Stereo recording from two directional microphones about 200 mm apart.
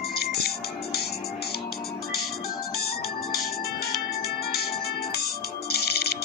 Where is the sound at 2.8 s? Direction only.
50° left (ahead or behind).